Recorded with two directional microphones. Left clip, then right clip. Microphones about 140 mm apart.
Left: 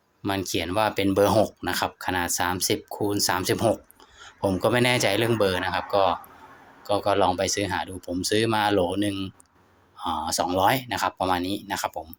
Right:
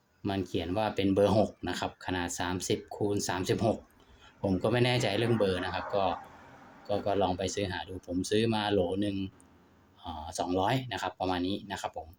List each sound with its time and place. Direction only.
0.2 s speech: 30° left (ahead or behind)